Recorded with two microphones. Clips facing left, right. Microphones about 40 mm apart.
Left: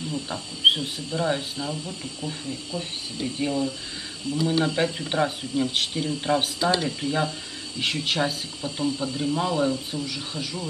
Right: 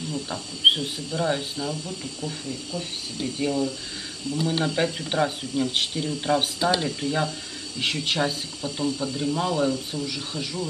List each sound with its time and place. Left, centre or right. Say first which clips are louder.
0.7 s speech: even; centre
2.4 s speech: even; centre
3.2 s speech: right 1 dB; centre
4.2 s speech: left 1 dB; left
4.6 s speech: even; centre